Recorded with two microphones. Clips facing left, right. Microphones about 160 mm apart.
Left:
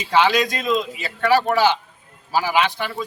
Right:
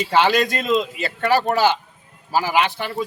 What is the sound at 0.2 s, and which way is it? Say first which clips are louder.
Speech: even; 55° right (ahead or behind).